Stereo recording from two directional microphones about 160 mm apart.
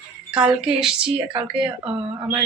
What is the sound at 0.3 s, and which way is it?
Speech, 5° right (ahead or behind).